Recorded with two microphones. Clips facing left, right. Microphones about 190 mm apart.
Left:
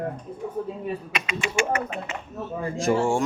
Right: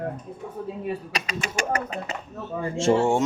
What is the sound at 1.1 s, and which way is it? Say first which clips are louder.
Speech: left 3 dB; 40° right (ahead or behind).